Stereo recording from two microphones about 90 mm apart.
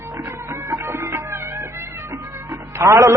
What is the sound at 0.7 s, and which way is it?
Music, 30° right (ahead or behind).